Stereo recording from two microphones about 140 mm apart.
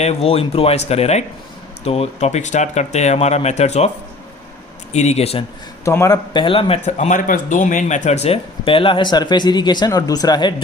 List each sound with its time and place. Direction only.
0.0 s speech: 50° left (ahead or behind)
5.8 s a man's voice: 20° left (ahead or behind)
6.3 s speech: 40° left (ahead or behind)